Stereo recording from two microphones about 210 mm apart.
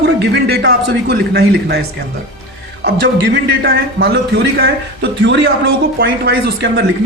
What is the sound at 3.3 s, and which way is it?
A man's voice, 50° right (ahead or behind).